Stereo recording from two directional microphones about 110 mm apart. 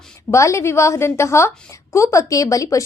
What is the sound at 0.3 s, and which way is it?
A woman's voice, 25° left (ahead or behind).